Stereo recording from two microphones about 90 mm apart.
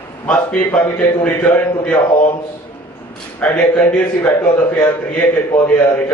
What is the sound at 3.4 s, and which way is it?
A man's voice, 15° left (ahead or behind).